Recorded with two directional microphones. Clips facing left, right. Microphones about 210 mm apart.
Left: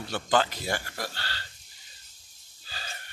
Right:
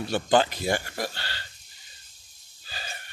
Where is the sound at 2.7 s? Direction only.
15° right (ahead or behind).